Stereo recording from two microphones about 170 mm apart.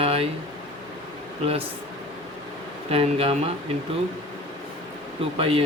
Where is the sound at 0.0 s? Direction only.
35° right (ahead or behind).